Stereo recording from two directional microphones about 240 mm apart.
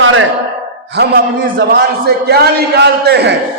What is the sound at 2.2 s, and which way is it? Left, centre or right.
A man's voice, right.